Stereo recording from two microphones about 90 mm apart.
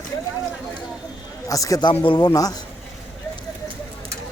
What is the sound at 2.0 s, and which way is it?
Speech, 55° left (ahead or behind).